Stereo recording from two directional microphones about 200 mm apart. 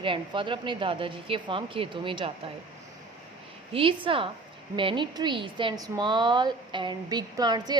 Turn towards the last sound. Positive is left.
turn(degrees=-20)  # may be behind; listen again after turning